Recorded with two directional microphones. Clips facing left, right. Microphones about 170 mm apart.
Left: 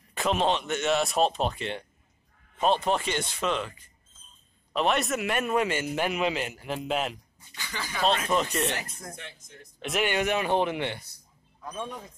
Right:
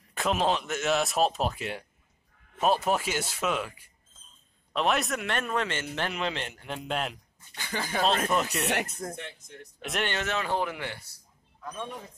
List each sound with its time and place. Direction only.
0.1 s a man's voice: centre (ahead or behind)
7.5 s speech: 50° right (ahead or behind)
8.3 s speech: 5° right (ahead or behind)
8.5 s speech: 70° right (ahead or behind)
9.8 s a man's voice: centre (ahead or behind); by 11.1 s 20° left (ahead or behind)